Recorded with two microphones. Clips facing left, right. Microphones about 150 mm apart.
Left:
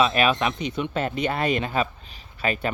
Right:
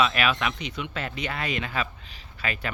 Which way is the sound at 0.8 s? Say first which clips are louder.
Left 7 dB; 50° left (ahead or behind).